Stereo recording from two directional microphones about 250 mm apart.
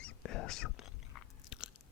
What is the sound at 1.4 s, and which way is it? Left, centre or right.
Biting, centre.